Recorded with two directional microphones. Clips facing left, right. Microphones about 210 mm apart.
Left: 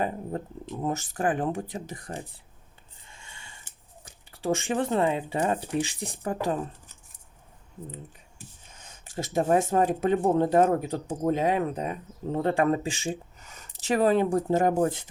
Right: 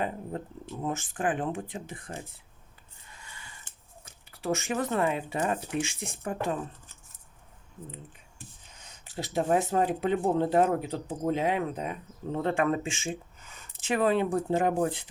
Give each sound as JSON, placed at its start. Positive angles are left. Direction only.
{"t": 0.8, "sound": "speech", "side_deg": 40}
{"t": 3.1, "sound": "a sound", "side_deg": 25}
{"t": 4.3, "sound": "speech", "side_deg": 30}
{"t": 8.9, "sound": "speech", "side_deg": 45}